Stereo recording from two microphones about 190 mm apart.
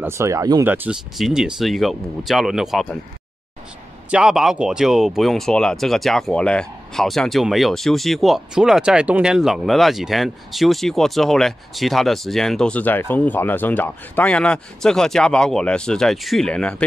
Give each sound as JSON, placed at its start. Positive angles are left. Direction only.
{"t": 0.0, "sound": "speech", "side_deg": -15}
{"t": 0.8, "sound": "speech", "side_deg": 0}
{"t": 4.1, "sound": "speech", "side_deg": -5}